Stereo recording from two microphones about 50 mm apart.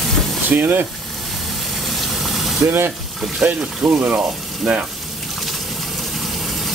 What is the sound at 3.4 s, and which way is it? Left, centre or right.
Speech, right.